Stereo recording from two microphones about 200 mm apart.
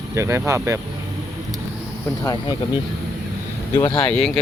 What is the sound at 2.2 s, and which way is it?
Speech, 20° left (ahead or behind).